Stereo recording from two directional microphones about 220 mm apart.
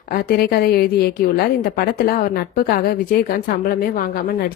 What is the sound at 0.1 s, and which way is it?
A woman's voice, 40° left (ahead or behind).